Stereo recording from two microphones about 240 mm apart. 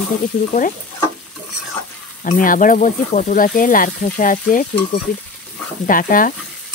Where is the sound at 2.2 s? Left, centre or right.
Left.